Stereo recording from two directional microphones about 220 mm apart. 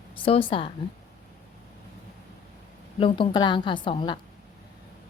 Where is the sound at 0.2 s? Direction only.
25° left (ahead or behind).